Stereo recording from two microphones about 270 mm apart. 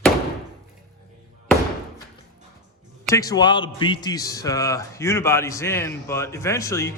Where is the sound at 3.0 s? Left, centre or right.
Centre.